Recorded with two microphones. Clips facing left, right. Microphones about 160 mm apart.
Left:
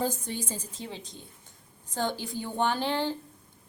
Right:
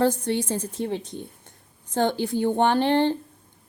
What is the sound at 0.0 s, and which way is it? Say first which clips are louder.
A woman's voice: right 9 dB; 75° right (ahead or behind).